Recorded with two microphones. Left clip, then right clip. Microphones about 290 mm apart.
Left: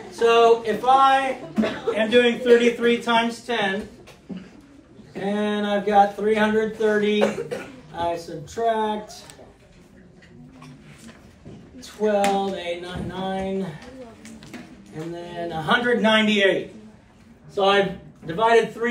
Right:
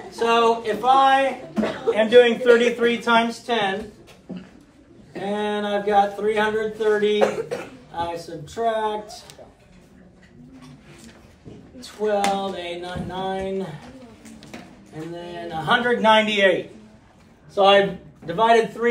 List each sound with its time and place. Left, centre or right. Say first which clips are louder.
0.1 s a man's voice: left 2 dB; centre
5.2 s speech: even; centre
7.2 s a man's voice: right 2 dB; right
7.9 s speech: left 2 dB; centre
11.8 s speech: left 1 dB; centre
15.1 s speech: even; centre
18.2 s speech: right 1 dB; centre